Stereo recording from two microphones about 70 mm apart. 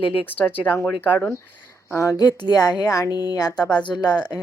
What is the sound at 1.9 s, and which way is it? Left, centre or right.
Speech, left.